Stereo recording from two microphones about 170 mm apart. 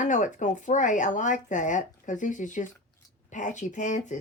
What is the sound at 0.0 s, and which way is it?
Speech, 50° left (ahead or behind).